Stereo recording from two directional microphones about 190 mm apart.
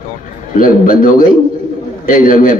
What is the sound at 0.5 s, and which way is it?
A man's voice, 50° left (ahead or behind).